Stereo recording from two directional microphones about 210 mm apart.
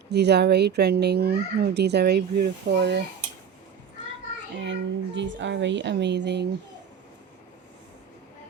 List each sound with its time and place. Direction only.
0.1 s speech: 50° right (ahead or behind)
4.6 s a child's voice: 60° right (ahead or behind)